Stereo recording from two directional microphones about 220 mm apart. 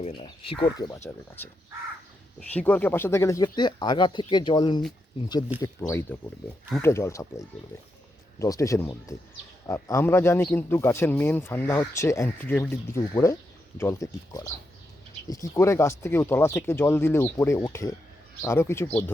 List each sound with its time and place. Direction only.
0.2 s speech: 25° left (ahead or behind)
2.5 s speech: 5° left (ahead or behind)